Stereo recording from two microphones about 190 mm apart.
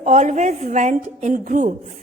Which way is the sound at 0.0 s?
40° right (ahead or behind).